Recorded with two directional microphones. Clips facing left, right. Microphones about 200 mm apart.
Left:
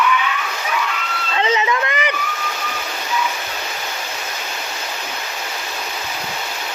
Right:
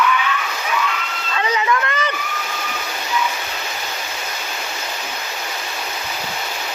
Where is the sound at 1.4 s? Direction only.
20° left (ahead or behind).